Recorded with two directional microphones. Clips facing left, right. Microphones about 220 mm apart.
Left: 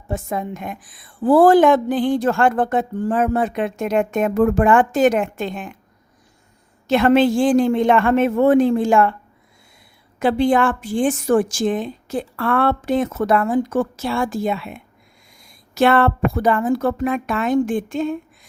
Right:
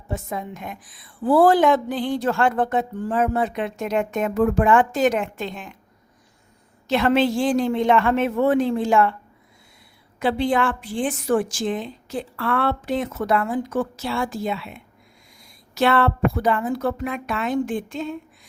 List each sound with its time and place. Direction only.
0.1 s a woman's voice: 50° left (ahead or behind)
6.8 s a woman's voice: 50° left (ahead or behind)
10.2 s a woman's voice: 50° left (ahead or behind)